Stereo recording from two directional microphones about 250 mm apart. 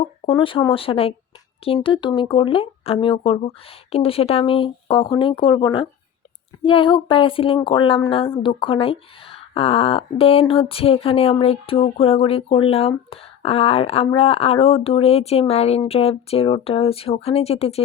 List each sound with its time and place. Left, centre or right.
0.3 s speech: left